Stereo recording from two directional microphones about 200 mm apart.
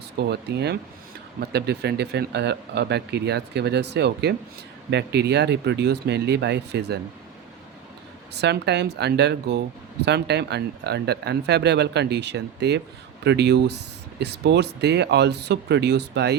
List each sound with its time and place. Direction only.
0.2 s speech: 55° right (ahead or behind)
8.3 s speech: 55° right (ahead or behind)